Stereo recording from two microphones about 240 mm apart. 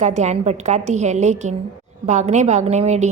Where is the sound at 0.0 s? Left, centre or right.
Right.